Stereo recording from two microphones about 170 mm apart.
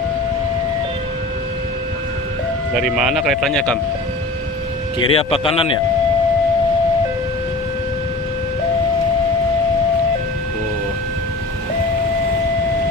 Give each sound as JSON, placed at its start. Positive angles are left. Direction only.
{"t": 2.7, "sound": "speech", "side_deg": -5}
{"t": 5.0, "sound": "a man's voice", "side_deg": 30}